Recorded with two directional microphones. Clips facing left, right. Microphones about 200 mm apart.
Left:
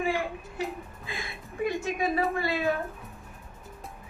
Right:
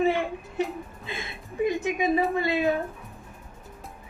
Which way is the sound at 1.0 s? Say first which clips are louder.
Right 2 dB; 20° right (ahead or behind).